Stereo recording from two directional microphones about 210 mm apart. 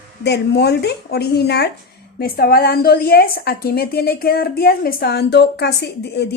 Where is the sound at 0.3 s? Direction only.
50° left (ahead or behind).